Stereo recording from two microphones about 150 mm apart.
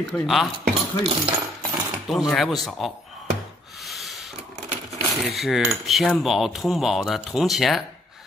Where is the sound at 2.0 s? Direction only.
Centre (ahead or behind).